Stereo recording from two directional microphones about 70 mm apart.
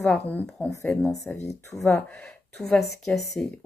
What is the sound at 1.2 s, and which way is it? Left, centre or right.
Speech, left.